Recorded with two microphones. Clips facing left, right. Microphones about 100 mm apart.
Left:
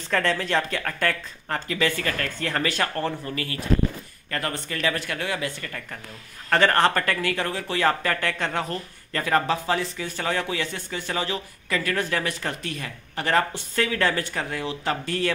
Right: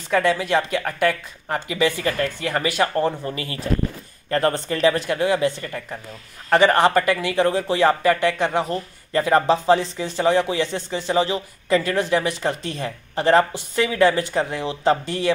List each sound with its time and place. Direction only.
0.1 s speech: 10° right (ahead or behind)